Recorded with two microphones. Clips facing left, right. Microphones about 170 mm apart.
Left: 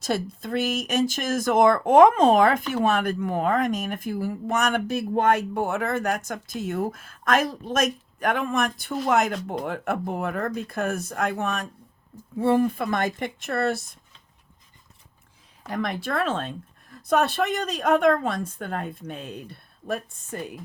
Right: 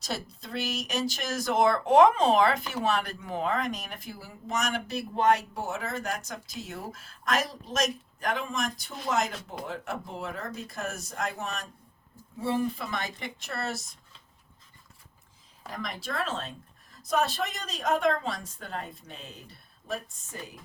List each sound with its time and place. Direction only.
0.0 s a woman's voice: 55° left (ahead or behind)
15.7 s a woman's voice: 65° left (ahead or behind)